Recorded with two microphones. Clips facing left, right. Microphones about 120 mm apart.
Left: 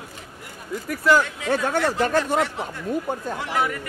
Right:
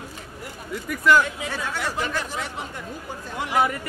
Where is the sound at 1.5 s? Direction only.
50° left (ahead or behind).